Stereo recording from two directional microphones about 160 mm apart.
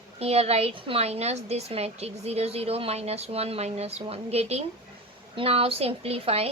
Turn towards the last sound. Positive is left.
turn(degrees=-40)  # may be behind; listen again after turning